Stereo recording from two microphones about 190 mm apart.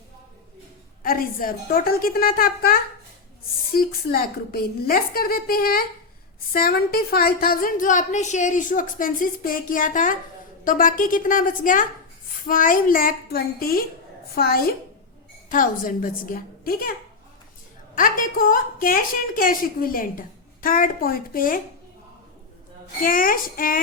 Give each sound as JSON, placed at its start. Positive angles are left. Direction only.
{"t": 1.0, "sound": "a woman's voice", "side_deg": 50}
{"t": 17.9, "sound": "a woman's voice", "side_deg": 45}
{"t": 23.0, "sound": "a woman's voice", "side_deg": 50}